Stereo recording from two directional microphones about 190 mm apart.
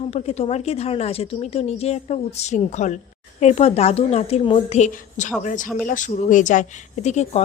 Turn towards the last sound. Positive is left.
turn(degrees=35)  # may be behind; listen again after turning